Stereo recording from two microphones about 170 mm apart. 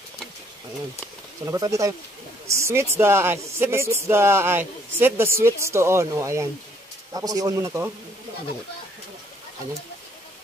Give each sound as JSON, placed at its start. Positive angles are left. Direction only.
{"t": 1.4, "sound": "speech", "side_deg": -20}